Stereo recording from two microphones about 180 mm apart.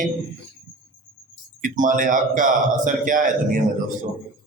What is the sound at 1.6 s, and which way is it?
Speech, 45° right (ahead or behind).